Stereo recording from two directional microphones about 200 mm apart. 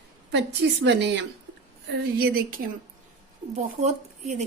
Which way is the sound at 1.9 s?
50° right (ahead or behind).